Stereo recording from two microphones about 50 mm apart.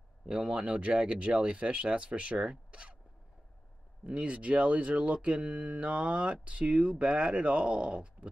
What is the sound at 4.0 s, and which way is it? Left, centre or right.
Speech, right.